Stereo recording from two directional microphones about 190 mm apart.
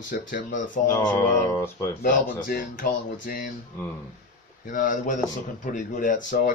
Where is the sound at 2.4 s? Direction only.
45° left (ahead or behind).